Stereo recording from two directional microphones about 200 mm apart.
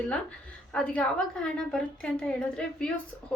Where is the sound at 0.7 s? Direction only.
5° left (ahead or behind).